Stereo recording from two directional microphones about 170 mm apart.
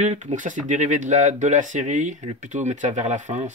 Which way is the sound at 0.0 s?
45° right (ahead or behind).